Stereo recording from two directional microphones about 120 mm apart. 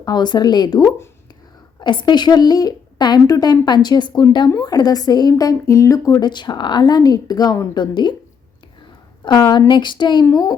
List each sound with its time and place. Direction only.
0.0 s a woman's voice: 35° left (ahead or behind)
9.2 s a woman's voice: 35° left (ahead or behind)